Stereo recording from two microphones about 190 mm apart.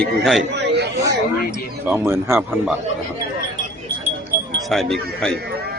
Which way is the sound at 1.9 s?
15° right (ahead or behind).